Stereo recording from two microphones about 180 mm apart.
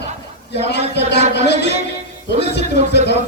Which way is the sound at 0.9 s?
70° left (ahead or behind).